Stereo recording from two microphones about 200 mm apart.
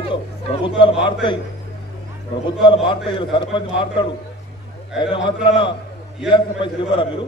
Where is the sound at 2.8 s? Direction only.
25° left (ahead or behind).